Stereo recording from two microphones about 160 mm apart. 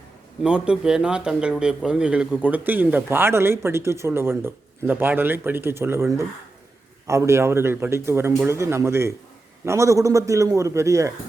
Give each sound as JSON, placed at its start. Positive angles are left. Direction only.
{"t": 0.4, "sound": "a man's voice", "side_deg": -5}